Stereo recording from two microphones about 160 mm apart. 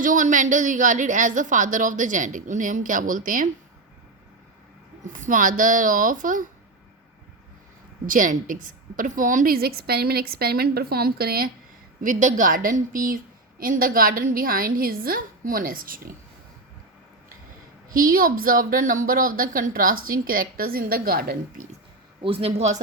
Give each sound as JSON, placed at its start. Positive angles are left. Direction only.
{"t": 0.0, "sound": "a woman's voice", "side_deg": -55}
{"t": 5.2, "sound": "a woman's voice", "side_deg": -55}
{"t": 8.0, "sound": "a woman's voice", "side_deg": -55}
{"t": 12.0, "sound": "a woman's voice", "side_deg": -55}
{"t": 17.8, "sound": "a woman's voice", "side_deg": -60}
{"t": 22.2, "sound": "speech", "side_deg": -35}